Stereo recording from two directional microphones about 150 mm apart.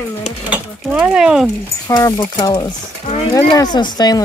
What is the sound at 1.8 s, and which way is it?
Speech, 25° left (ahead or behind).